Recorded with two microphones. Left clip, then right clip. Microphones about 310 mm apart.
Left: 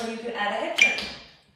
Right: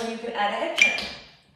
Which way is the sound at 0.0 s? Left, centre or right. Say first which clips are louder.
Right 2 dB; centre.